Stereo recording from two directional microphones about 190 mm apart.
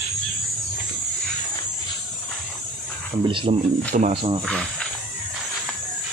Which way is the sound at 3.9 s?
40° right (ahead or behind).